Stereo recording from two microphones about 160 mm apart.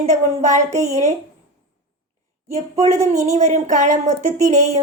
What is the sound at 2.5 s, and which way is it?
Speech, 40° right (ahead or behind).